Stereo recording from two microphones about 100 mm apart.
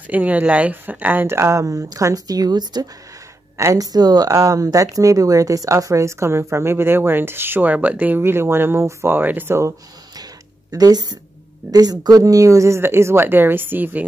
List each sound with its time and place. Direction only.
0.0 s speech: 15° right (ahead or behind)
10.7 s a woman's voice: 40° right (ahead or behind); by 14.0 s 20° right (ahead or behind)